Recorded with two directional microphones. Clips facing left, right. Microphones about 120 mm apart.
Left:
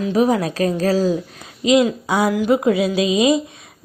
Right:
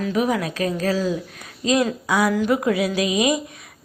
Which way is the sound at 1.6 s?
15° left (ahead or behind).